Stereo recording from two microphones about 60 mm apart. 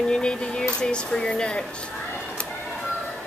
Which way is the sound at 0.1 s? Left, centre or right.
Centre.